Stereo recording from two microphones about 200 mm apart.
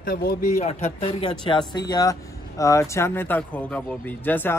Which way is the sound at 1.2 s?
25° left (ahead or behind).